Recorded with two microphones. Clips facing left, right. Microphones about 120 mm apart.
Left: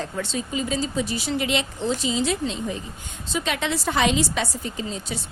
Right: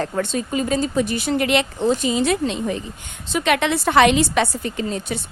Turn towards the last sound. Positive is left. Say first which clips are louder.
# right 5 dB
turn(degrees=-65)  # may be behind; listen again after turning